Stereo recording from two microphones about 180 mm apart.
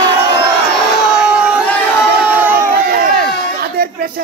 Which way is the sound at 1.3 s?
5° right (ahead or behind).